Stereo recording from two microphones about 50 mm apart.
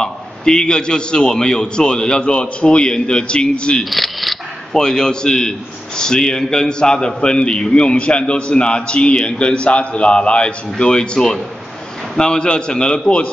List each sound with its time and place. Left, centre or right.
0.0 s a man's voice: centre
3.9 s a sound: centre
4.7 s a man's voice: centre